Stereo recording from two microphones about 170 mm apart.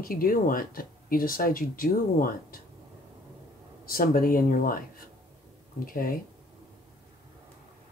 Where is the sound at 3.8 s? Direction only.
60° left (ahead or behind).